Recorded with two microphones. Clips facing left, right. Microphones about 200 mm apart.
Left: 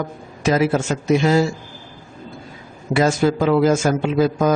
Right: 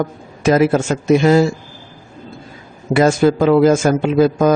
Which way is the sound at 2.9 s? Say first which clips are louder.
Right 4 dB; 50° right (ahead or behind).